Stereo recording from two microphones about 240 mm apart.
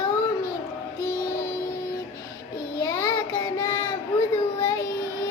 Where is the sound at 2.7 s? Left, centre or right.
Centre.